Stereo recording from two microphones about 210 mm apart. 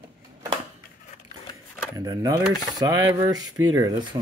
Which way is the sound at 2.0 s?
20° right (ahead or behind).